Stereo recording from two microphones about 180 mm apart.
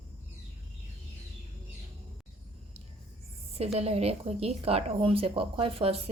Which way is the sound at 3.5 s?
35° right (ahead or behind).